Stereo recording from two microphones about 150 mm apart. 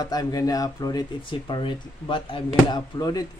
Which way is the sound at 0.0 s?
25° left (ahead or behind).